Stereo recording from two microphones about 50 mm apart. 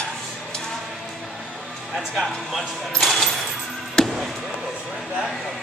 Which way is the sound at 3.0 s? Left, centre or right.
Centre.